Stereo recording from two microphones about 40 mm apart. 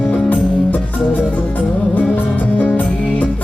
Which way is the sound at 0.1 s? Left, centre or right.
Left.